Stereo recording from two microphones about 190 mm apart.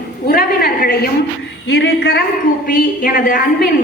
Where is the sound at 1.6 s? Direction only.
65° left (ahead or behind).